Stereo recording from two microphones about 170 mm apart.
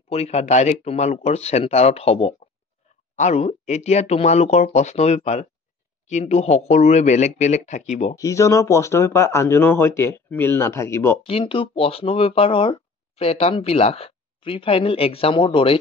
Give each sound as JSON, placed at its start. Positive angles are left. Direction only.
{"t": 0.1, "sound": "speech", "side_deg": 40}
{"t": 8.2, "sound": "speech", "side_deg": 20}
{"t": 11.2, "sound": "speech", "side_deg": 30}